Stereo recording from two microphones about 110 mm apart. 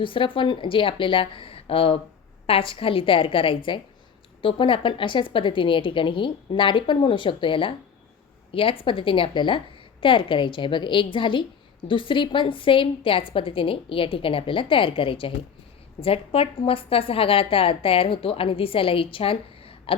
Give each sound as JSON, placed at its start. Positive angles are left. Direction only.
{"t": 0.0, "sound": "a woman's voice", "side_deg": 50}